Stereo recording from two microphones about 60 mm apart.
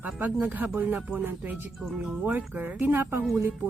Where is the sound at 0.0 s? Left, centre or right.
Right.